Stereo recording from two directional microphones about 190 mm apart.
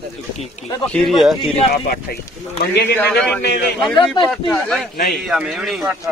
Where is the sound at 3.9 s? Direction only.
25° left (ahead or behind).